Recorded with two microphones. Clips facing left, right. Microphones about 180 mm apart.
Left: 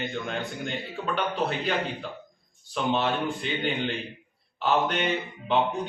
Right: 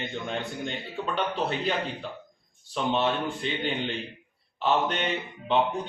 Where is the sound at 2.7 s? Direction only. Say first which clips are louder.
Even; centre (ahead or behind).